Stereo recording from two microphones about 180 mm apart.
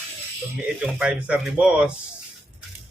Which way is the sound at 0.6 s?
5° right (ahead or behind).